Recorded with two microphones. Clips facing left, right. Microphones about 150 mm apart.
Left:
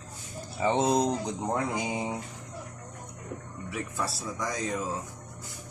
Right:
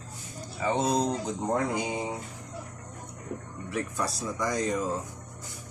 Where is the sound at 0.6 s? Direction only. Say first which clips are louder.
Left 2 dB; 25° left (ahead or behind).